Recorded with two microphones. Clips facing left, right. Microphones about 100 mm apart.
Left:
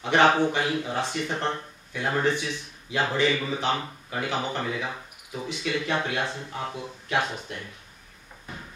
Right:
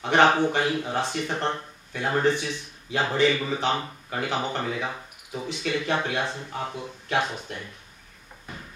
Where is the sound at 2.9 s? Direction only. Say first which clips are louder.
Right 2 dB; 30° right (ahead or behind).